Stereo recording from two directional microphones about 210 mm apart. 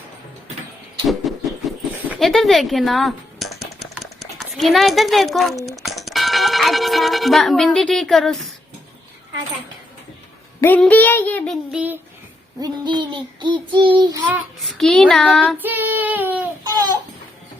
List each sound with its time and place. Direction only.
1.3 s a sound: centre (ahead or behind)
5.6 s speech: centre (ahead or behind)
10.6 s child singing: 10° left (ahead or behind)
11.7 s speech: 5° right (ahead or behind)
12.5 s child singing: 20° right (ahead or behind)
14.8 s child singing: centre (ahead or behind)
15.5 s child singing: 10° right (ahead or behind)